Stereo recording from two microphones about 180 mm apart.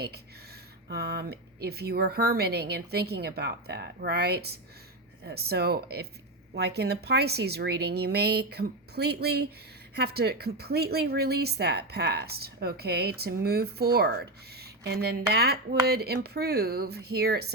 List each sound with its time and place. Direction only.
0.9 s speech: 65° right (ahead or behind)